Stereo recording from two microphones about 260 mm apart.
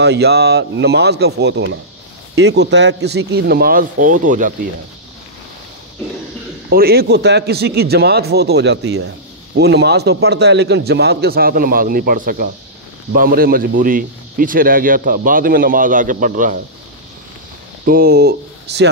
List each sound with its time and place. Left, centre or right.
0.0 s a man's voice: right
6.7 s a man's voice: right
17.8 s a man's voice: right